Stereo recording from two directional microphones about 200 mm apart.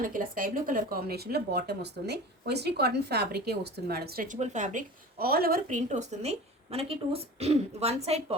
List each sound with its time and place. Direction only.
0.0 s speech: 45° right (ahead or behind)